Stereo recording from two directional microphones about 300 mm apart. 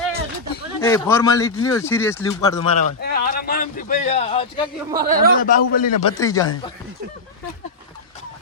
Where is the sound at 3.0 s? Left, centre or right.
Left.